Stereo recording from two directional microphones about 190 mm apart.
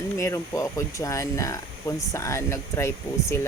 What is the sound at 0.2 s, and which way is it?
Speech, 15° left (ahead or behind).